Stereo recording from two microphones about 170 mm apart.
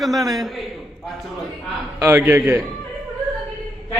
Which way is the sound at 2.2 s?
15° right (ahead or behind).